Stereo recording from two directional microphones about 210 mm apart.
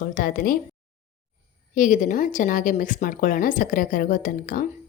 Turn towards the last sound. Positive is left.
turn(degrees=40)  # may be behind; listen again after turning